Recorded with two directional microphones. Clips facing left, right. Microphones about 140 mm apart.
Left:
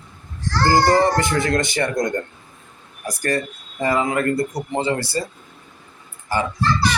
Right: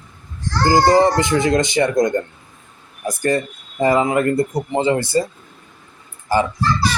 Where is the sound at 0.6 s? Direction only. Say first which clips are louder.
Right 3 dB; 15° right (ahead or behind).